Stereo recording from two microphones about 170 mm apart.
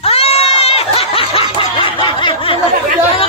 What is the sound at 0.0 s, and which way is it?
Snicker, 35° left (ahead or behind).